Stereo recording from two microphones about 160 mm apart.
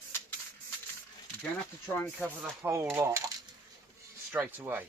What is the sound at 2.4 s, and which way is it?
Speech, 15° right (ahead or behind).